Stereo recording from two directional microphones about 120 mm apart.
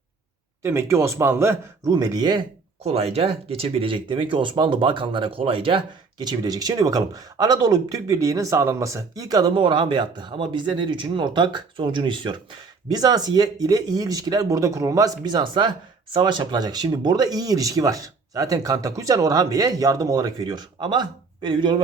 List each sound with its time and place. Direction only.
0.6 s a man's voice: 20° right (ahead or behind)
2.8 s speech: 55° right (ahead or behind); by 21.8 s 40° right (ahead or behind)